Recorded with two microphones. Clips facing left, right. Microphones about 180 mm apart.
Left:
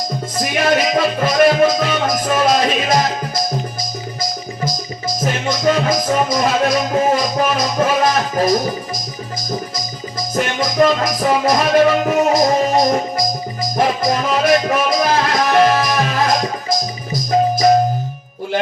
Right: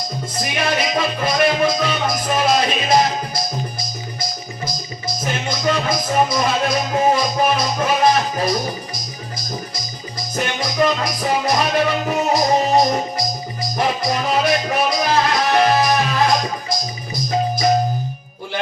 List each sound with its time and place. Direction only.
0.3 s music: 45° left (ahead or behind)
4.2 s music: 90° left
5.2 s music: 45° left (ahead or behind)
10.3 s music: 45° left (ahead or behind)